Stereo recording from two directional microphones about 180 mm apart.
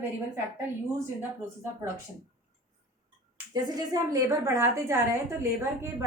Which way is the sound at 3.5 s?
20° right (ahead or behind).